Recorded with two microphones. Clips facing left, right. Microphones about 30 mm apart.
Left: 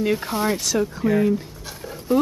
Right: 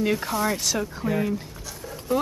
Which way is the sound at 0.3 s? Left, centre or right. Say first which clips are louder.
Left 2 dB; centre.